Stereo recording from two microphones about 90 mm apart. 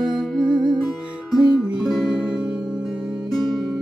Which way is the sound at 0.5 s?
60° right (ahead or behind).